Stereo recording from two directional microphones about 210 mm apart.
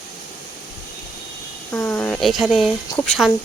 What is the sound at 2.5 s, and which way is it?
Speech, centre (ahead or behind).